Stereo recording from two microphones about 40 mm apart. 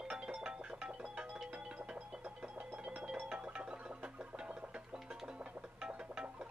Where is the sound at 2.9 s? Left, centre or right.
Right.